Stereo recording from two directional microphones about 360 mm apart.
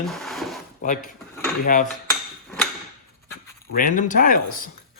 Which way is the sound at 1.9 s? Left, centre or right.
Centre.